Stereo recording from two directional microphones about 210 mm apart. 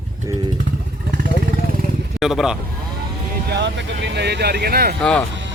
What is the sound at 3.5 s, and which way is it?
Speech, 55° right (ahead or behind).